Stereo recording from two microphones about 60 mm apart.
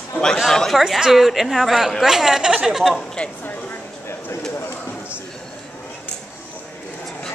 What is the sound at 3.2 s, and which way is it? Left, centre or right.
Speech, centre.